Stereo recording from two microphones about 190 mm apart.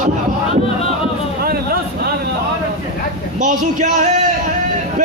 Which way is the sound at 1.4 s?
50° right (ahead or behind).